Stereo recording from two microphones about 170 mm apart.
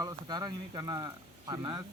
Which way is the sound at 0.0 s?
25° right (ahead or behind).